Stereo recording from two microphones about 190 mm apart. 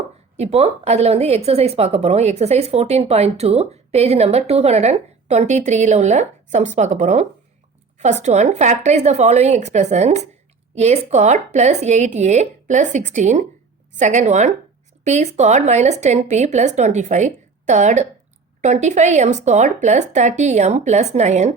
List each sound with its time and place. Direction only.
0.3 s speech: 35° right (ahead or behind)